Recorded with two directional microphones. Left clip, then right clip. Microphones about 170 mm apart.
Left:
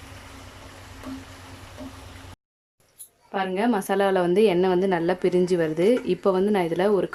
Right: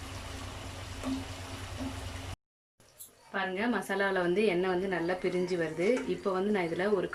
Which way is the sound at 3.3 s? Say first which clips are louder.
Left 8 dB; 35° left (ahead or behind).